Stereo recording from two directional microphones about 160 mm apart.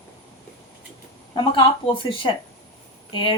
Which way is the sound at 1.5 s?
30° left (ahead or behind).